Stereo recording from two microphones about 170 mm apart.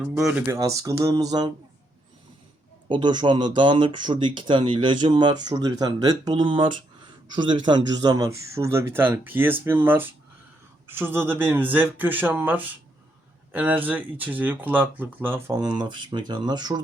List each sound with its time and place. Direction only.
0.0 s speech: 5° right (ahead or behind)
0.4 s speech: 20° right (ahead or behind)
2.9 s speech: 25° right (ahead or behind)